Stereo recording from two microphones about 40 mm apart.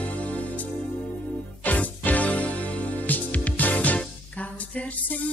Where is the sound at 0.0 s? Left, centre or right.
Left.